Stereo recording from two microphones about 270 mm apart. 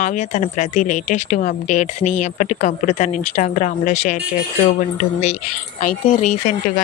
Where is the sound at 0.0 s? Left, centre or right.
Left.